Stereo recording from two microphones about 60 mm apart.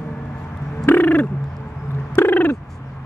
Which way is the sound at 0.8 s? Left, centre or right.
Left.